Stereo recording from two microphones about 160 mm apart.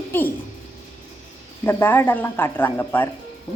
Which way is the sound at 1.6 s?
15° left (ahead or behind).